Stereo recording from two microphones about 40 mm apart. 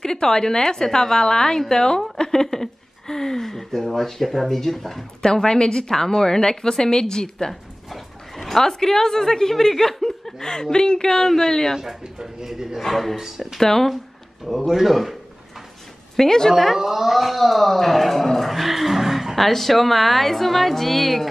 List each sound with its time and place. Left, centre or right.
0.0 s speech: centre
2.1 s a sound: centre
2.4 s speech: centre
5.2 s speech: centre
7.9 s speech: centre
11.7 s speech: centre
12.0 s a man's voice: centre
12.8 s speech: centre
13.2 s speech: centre
13.6 s speech: centre
14.7 s speech: centre
16.2 s speech: centre
16.5 s speech: centre